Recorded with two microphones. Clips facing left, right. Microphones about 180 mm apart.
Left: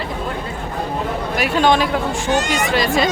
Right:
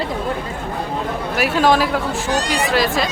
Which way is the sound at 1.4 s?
Centre (ahead or behind).